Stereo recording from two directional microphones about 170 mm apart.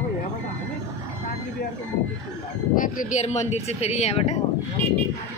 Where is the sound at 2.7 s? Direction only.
50° left (ahead or behind).